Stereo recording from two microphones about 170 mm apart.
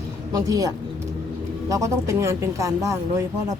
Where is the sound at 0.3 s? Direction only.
20° right (ahead or behind).